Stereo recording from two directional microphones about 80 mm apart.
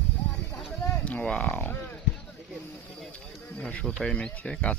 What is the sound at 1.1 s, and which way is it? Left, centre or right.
Speech, centre.